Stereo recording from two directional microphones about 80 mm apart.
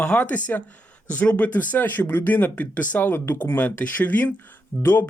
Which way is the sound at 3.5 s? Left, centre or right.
Centre.